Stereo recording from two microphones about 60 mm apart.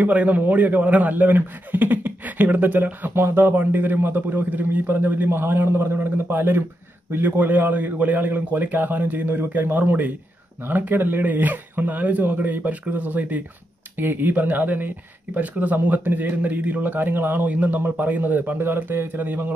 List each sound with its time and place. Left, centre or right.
0.0 s a man's voice: right